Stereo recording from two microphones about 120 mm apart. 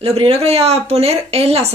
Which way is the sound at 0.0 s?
55° right (ahead or behind).